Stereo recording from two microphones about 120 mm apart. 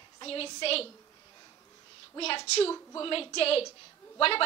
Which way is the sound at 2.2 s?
55° left (ahead or behind).